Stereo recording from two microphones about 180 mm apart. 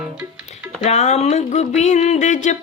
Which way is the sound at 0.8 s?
40° left (ahead or behind).